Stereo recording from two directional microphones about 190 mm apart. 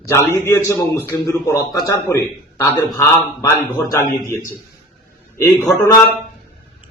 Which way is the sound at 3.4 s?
15° left (ahead or behind).